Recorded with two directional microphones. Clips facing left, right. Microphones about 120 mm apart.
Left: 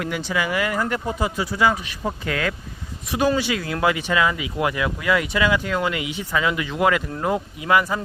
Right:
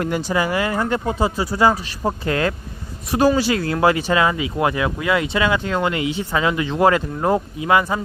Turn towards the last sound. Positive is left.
turn(degrees=-25)  # may be behind; listen again after turning